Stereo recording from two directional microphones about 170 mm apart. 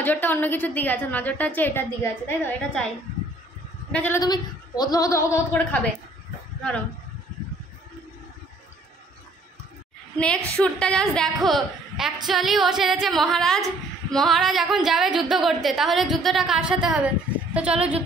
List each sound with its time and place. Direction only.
0.0 s a woman's voice: 10° left (ahead or behind)
3.9 s a woman's voice: 10° left (ahead or behind)
4.2 s a woman's voice: 25° left (ahead or behind)
10.1 s a woman's voice: 5° left (ahead or behind)